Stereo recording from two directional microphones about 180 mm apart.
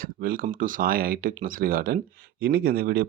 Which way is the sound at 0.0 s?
50° right (ahead or behind).